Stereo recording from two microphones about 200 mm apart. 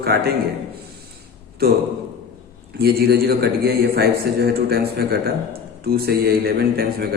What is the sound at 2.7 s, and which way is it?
A man's voice, 50° right (ahead or behind).